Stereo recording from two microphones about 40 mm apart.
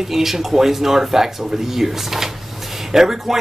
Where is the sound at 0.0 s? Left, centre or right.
Centre.